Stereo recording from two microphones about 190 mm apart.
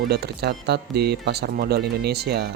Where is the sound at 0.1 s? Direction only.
60° right (ahead or behind).